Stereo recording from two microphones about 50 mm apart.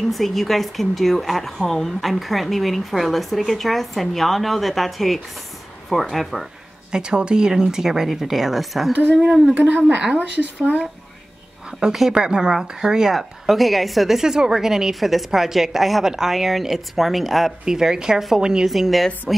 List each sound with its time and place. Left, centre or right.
0.1 s a woman's voice: centre
6.9 s speech: centre
9.5 s speech: right
11.8 s a woman's voice: centre
17.6 s speech: centre
18.7 s a woman's voice: centre